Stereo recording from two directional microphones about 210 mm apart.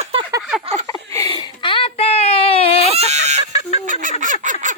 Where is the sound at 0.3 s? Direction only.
15° right (ahead or behind).